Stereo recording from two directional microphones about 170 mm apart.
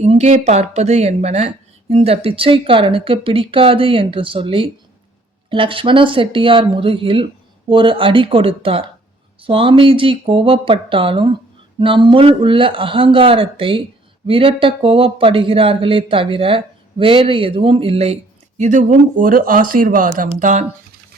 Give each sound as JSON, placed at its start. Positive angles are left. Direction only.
{"t": 0.0, "sound": "speech", "side_deg": -40}
{"t": 20.2, "sound": "speech", "side_deg": -45}